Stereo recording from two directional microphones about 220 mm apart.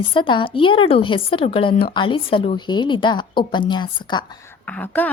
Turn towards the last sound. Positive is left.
turn(degrees=5)  # may be behind; listen again after turning